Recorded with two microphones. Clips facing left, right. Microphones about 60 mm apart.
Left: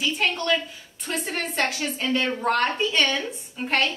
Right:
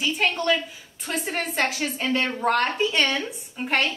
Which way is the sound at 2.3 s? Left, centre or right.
Centre.